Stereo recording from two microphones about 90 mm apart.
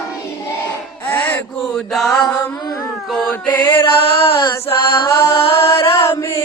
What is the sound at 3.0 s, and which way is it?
Mantra, centre (ahead or behind).